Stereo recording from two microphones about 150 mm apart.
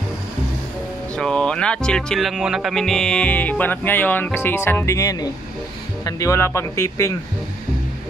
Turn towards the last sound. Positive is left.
turn(degrees=20)  # may be behind; listen again after turning